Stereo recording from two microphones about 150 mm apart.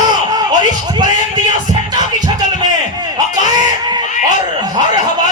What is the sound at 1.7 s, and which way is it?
Music, 30° right (ahead or behind).